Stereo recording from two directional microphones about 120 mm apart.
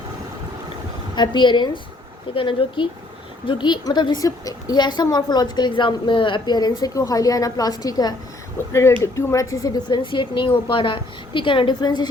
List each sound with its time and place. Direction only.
1.1 s a woman's voice: 40° left (ahead or behind)